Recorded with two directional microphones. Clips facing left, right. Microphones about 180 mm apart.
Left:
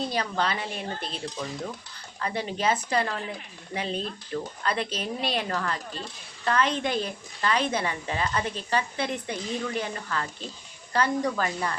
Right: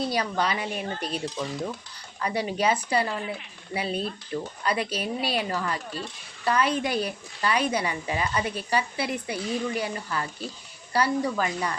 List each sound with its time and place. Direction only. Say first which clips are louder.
0.1 s a woman's voice: right 1 dB; 10° right (ahead or behind)
2.2 s a woman's voice: right 2 dB; 10° right (ahead or behind)